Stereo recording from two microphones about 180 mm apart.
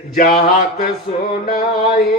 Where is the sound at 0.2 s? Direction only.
45° left (ahead or behind).